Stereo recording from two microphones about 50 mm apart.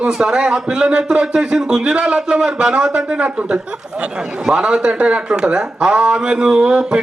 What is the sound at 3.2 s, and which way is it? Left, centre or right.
A man's voice, right.